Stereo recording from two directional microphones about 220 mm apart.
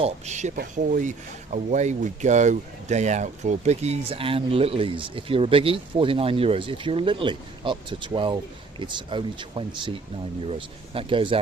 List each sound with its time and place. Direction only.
0.0 s speech: 30° right (ahead or behind)